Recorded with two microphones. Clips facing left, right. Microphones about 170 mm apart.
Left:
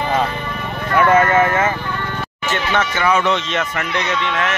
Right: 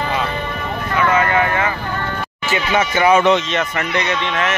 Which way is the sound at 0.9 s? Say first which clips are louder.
Left 3 dB; 45° left (ahead or behind).